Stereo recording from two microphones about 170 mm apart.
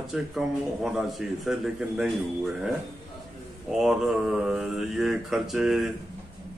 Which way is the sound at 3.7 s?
Centre (ahead or behind).